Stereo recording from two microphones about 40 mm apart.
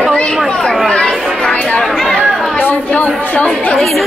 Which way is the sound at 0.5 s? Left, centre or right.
Centre.